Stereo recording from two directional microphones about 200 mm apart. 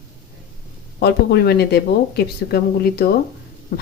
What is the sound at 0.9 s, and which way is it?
A woman's voice, 55° left (ahead or behind).